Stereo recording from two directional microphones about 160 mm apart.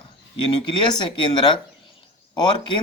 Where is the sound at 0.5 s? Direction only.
30° left (ahead or behind).